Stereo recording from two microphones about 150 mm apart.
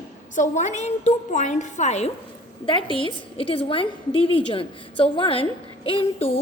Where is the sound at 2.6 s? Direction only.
35° left (ahead or behind).